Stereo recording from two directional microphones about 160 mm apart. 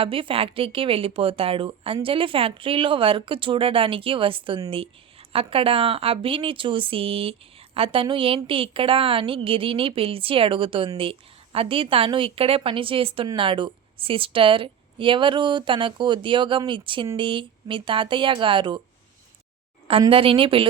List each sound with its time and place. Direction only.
0.0 s speech: 35° right (ahead or behind)
20.1 s speech: 35° right (ahead or behind)